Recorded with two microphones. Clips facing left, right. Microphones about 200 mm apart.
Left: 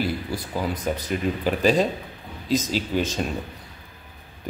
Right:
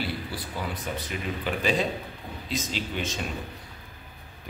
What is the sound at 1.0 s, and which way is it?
Speech, 40° left (ahead or behind).